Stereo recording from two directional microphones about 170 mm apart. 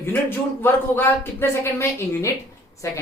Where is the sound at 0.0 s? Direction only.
10° left (ahead or behind).